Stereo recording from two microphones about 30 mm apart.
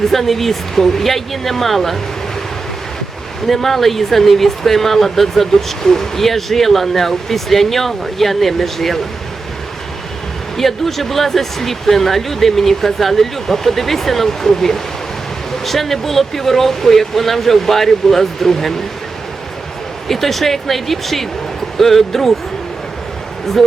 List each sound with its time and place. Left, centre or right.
0.1 s speech: centre
3.4 s speech: centre
10.6 s speech: centre
20.1 s speech: centre